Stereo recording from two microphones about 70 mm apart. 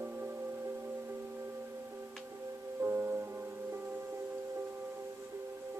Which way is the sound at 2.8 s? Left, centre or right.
Right.